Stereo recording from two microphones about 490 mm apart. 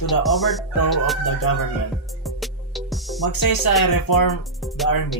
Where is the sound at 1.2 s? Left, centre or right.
Left.